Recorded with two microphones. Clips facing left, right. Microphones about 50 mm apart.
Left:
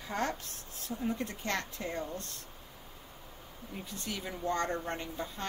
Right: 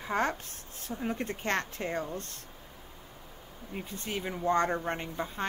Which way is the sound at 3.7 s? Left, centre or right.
Right.